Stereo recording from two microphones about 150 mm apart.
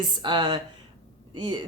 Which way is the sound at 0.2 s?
30° right (ahead or behind).